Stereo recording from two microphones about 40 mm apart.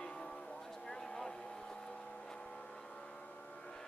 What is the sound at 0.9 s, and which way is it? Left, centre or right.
Vehicle, centre.